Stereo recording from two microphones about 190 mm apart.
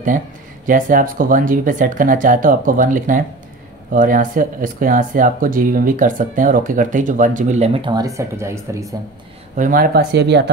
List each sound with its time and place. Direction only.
0.7 s speech: 45° right (ahead or behind); by 8.9 s 15° right (ahead or behind)
9.6 s speech: 50° right (ahead or behind); by 10.5 s 65° right (ahead or behind)